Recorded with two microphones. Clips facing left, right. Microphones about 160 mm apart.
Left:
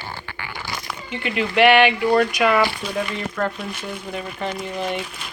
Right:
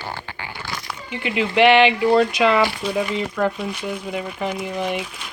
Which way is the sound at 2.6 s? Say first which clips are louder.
Right 1 dB; 10° right (ahead or behind).